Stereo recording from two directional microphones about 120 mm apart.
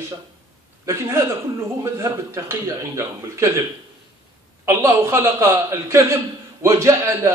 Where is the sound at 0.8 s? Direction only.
25° right (ahead or behind).